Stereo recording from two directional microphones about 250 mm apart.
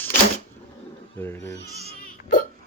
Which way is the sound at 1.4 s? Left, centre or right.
Right.